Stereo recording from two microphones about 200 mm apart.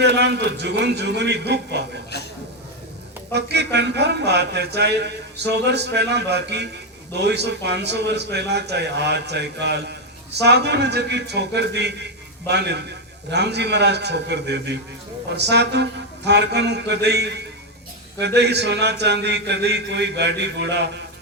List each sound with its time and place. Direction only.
0.0 s a man's voice: 55° right (ahead or behind)
3.3 s a man's voice: 55° right (ahead or behind)
18.3 s a man's voice: 55° right (ahead or behind)